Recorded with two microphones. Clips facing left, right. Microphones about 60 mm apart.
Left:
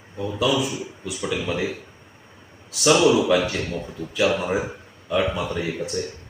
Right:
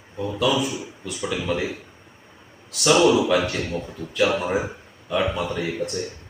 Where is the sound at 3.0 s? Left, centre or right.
Centre.